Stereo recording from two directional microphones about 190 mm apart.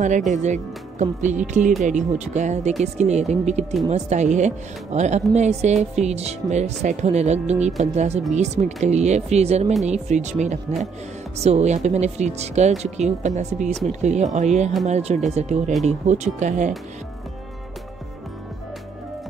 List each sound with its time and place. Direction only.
0.3 s speech: 40° right (ahead or behind)